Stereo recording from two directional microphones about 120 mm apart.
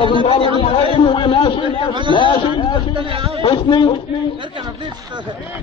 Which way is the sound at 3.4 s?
50° left (ahead or behind).